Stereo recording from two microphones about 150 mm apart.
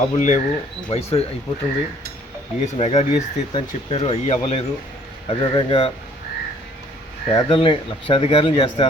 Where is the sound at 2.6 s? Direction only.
50° left (ahead or behind).